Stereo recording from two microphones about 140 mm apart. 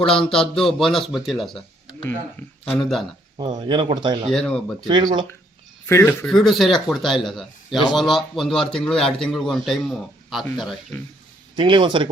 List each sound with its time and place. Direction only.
0.0 s speech: 5° left (ahead or behind)
3.3 s a man's voice: 30° right (ahead or behind)
4.3 s speech: 5° left (ahead or behind)
4.9 s a man's voice: 35° right (ahead or behind)
5.8 s speech: 15° left (ahead or behind)
6.2 s a man's voice: centre (ahead or behind)
11.5 s a man's voice: 35° right (ahead or behind)